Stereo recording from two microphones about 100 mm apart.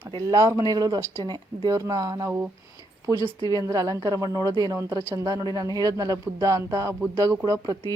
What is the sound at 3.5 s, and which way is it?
Speech, 35° right (ahead or behind).